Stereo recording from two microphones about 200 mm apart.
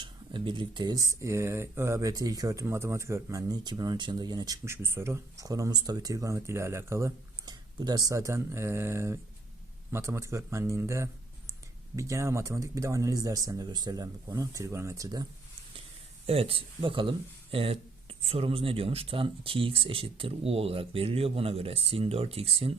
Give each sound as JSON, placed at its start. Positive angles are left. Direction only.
{"t": 0.0, "sound": "speech", "side_deg": -25}
{"t": 16.2, "sound": "speech", "side_deg": -30}